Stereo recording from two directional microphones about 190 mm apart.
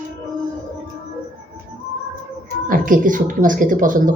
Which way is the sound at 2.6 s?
45° right (ahead or behind).